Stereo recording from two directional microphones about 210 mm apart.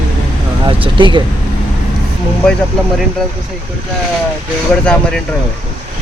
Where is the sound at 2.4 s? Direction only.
5° left (ahead or behind).